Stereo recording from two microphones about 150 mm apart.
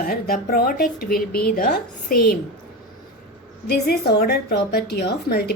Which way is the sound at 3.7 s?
90° left.